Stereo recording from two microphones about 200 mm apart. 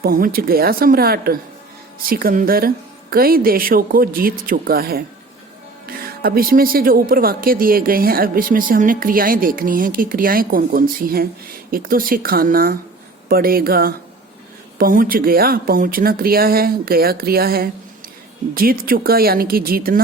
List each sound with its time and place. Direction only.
0.0 s speech: 45° right (ahead or behind)